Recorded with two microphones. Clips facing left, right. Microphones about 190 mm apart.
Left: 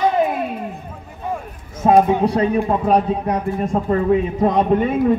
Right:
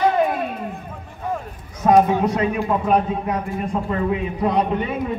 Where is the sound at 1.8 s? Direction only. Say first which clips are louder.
Left 2 dB; 25° left (ahead or behind).